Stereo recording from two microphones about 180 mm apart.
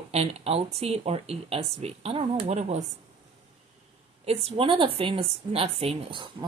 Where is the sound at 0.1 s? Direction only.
35° right (ahead or behind).